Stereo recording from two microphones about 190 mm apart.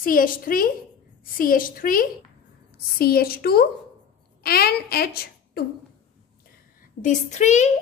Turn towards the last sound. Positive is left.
turn(degrees=40)  # may be behind; listen again after turning